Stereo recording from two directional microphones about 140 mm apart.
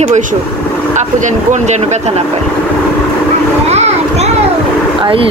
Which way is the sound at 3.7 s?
50° right (ahead or behind).